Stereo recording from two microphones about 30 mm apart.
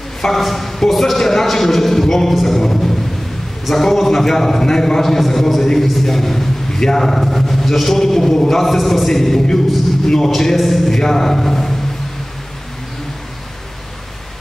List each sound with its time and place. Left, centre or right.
0.2 s a man's voice: centre
10.5 s a man's voice: centre